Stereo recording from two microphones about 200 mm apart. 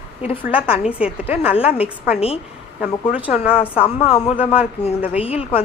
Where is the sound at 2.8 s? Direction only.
5° right (ahead or behind).